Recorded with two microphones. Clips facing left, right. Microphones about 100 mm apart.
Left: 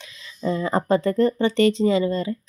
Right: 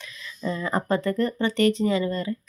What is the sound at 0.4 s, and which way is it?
Speech, 25° left (ahead or behind).